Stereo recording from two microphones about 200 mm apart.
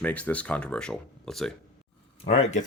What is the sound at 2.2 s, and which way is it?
Speech, 40° left (ahead or behind).